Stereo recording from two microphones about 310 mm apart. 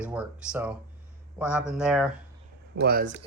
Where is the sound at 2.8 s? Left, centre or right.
Right.